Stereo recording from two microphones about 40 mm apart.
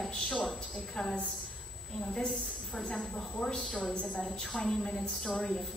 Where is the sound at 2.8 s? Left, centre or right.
Centre.